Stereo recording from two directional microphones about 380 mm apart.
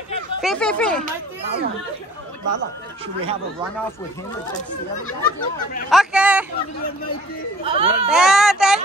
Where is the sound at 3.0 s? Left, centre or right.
Centre.